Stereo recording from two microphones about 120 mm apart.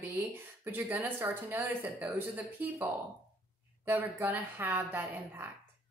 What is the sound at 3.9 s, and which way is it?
A woman's voice, 20° right (ahead or behind).